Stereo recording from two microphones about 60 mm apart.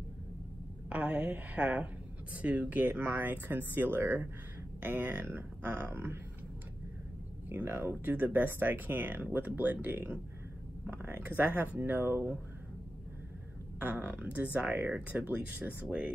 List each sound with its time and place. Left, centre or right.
0.8 s speech: right
7.4 s speech: right
13.7 s speech: right